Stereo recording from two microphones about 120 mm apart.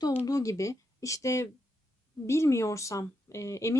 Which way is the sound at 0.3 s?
30° left (ahead or behind).